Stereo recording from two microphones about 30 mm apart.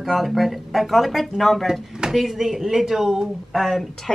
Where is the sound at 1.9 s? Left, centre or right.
Right.